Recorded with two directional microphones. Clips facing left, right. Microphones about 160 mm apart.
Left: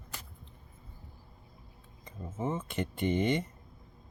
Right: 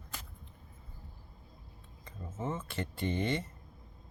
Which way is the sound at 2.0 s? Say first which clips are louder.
Left 3 dB; 15° left (ahead or behind).